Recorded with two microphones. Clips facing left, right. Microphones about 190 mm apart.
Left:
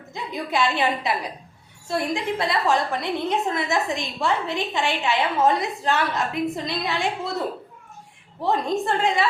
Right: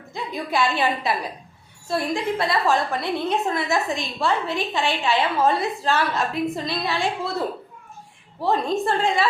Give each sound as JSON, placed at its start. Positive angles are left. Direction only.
{"t": 0.1, "sound": "a woman's voice", "side_deg": 20}
{"t": 8.4, "sound": "a woman's voice", "side_deg": 20}